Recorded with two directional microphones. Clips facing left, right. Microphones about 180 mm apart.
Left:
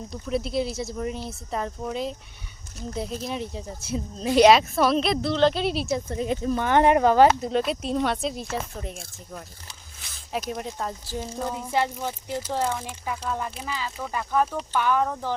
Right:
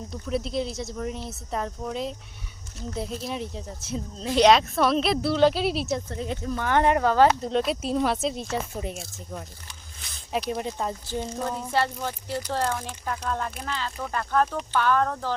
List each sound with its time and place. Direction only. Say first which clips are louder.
0.1 s speech: left 1 dB; centre (ahead or behind)
6.1 s speech: left 5 dB; 15° left (ahead or behind)
7.5 s speech: even; centre (ahead or behind)
10.0 s a sound: right 2 dB; centre (ahead or behind)
10.5 s speech: right 2 dB; centre (ahead or behind)